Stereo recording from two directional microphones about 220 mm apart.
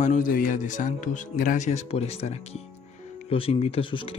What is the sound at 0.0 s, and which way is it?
Speech, 35° left (ahead or behind).